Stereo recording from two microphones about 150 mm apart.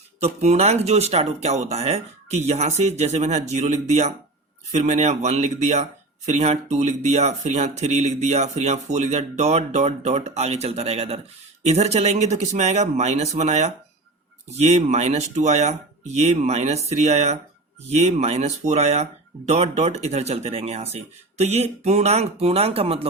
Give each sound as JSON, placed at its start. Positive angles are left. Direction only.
{"t": 0.2, "sound": "speech", "side_deg": -45}